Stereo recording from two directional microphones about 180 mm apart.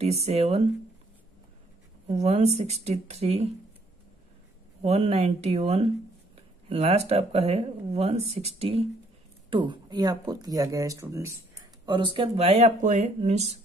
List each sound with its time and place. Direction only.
0.0 s speech: 35° right (ahead or behind)
2.0 s speech: 40° right (ahead or behind)
4.8 s speech: 35° right (ahead or behind); by 11.3 s 15° right (ahead or behind)
11.8 s speech: 25° right (ahead or behind)